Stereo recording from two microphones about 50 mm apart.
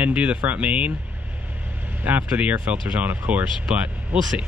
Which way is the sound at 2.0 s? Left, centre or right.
Right.